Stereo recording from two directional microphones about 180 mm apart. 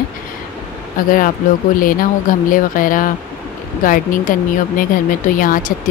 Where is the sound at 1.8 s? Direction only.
50° left (ahead or behind).